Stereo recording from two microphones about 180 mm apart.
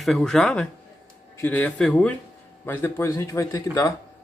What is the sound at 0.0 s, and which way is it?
Speech, centre (ahead or behind).